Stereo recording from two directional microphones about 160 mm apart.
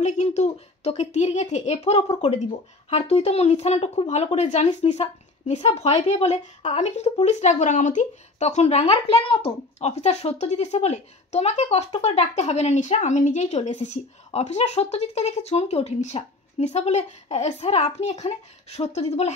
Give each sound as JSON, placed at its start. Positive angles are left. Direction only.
{"t": 0.0, "sound": "speech", "side_deg": 45}